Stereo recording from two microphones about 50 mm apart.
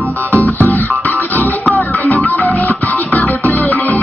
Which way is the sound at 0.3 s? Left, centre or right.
Left.